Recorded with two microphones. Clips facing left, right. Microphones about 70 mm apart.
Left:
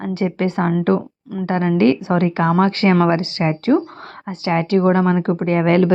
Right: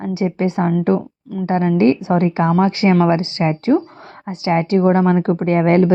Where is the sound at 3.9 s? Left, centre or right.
Left.